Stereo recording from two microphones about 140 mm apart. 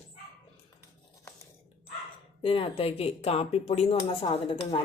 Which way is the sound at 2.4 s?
40° left (ahead or behind).